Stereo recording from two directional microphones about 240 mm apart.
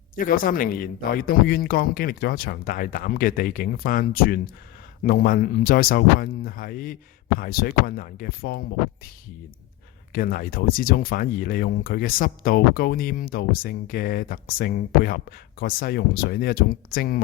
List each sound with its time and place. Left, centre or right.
0.2 s speech: left
10.1 s speech: left